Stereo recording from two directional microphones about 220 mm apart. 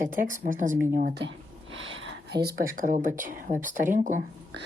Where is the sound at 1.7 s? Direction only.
60° right (ahead or behind).